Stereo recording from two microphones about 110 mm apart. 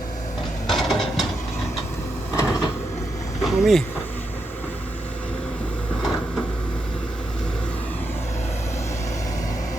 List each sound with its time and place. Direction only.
0.7 s mechanisms: centre (ahead or behind)
2.3 s vehicle: 30° left (ahead or behind)
3.4 s speech: centre (ahead or behind)